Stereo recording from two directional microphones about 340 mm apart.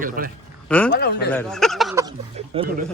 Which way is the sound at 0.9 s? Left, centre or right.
Left.